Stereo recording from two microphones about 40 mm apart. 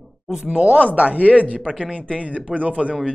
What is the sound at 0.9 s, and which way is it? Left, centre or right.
Speech, right.